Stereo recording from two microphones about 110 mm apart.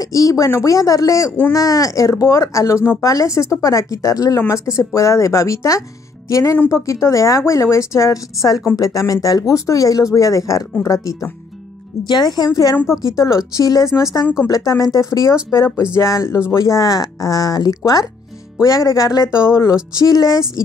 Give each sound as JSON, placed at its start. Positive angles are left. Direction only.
{"t": 0.0, "sound": "speech", "side_deg": 30}
{"t": 12.1, "sound": "speech", "side_deg": 40}
{"t": 12.4, "sound": "speech", "side_deg": 30}